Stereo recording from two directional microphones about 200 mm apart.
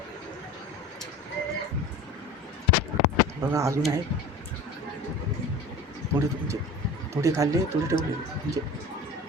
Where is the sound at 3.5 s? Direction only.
15° right (ahead or behind).